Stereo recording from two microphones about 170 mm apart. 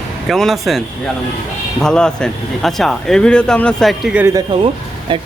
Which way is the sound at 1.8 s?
5° left (ahead or behind).